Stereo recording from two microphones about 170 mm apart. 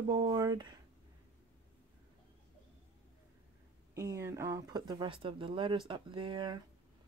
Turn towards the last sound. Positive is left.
turn(degrees=-25)  # may be behind; listen again after turning